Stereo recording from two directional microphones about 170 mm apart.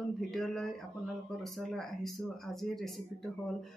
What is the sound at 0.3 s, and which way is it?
Speech, centre (ahead or behind).